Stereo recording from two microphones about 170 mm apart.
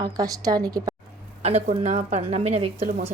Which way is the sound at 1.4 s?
40° right (ahead or behind).